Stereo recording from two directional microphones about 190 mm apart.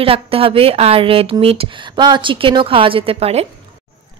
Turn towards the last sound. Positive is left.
turn(degrees=-30)  # may be behind; listen again after turning